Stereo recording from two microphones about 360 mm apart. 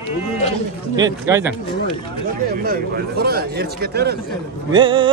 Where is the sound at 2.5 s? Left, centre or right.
Right.